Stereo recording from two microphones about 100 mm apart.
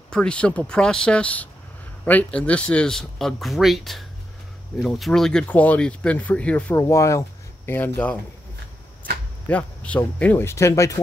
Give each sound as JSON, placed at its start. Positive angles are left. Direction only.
{"t": 0.1, "sound": "speech", "side_deg": 10}
{"t": 5.5, "sound": "speech", "side_deg": 15}
{"t": 6.7, "sound": "speech", "side_deg": 30}
{"t": 9.5, "sound": "speech", "side_deg": 15}
{"t": 10.4, "sound": "speech", "side_deg": 25}